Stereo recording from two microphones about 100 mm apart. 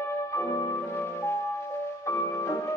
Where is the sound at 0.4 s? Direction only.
35° left (ahead or behind).